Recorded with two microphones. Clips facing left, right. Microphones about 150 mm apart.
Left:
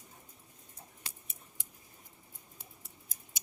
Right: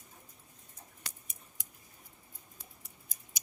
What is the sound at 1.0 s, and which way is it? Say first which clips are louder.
Scissors: right 2 dB; 25° left (ahead or behind).